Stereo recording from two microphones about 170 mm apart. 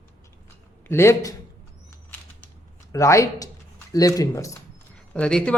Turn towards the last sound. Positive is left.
turn(degrees=5)  # may be behind; listen again after turning